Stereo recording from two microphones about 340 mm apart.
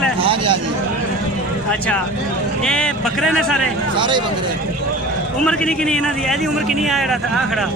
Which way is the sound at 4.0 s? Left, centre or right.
Centre.